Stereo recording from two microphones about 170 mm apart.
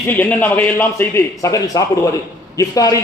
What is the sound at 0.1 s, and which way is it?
A man's voice, 10° left (ahead or behind).